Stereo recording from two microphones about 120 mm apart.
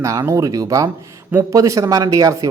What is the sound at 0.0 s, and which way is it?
Speech, 25° right (ahead or behind).